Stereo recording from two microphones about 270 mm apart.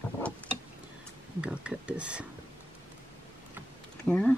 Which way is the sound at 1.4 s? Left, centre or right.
Centre.